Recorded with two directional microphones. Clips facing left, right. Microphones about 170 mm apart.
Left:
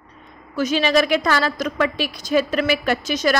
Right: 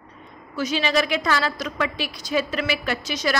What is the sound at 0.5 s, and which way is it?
A woman's voice, 50° left (ahead or behind).